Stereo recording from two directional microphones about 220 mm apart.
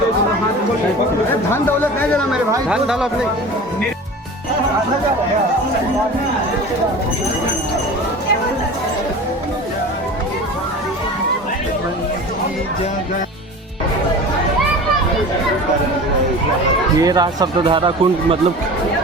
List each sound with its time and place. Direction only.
1.5 s speech: 10° left (ahead or behind)
17.0 s speech: 15° right (ahead or behind)